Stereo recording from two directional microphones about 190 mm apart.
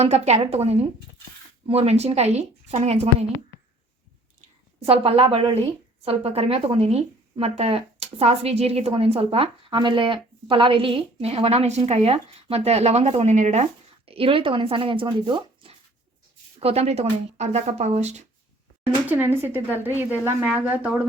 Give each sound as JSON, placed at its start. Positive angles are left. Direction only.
{"t": 0.0, "sound": "speech", "side_deg": -35}
{"t": 4.8, "sound": "speech", "side_deg": -30}
{"t": 14.1, "sound": "speech", "side_deg": -30}
{"t": 19.0, "sound": "a woman's voice", "side_deg": -10}